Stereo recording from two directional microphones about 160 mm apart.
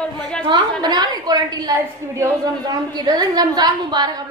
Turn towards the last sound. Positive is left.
turn(degrees=-25)  # may be behind; listen again after turning